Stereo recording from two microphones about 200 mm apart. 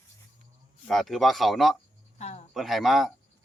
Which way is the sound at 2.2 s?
35° left (ahead or behind).